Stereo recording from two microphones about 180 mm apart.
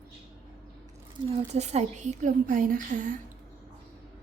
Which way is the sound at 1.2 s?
35° right (ahead or behind).